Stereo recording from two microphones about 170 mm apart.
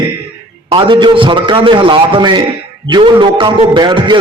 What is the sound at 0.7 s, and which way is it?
A man's voice, 30° right (ahead or behind).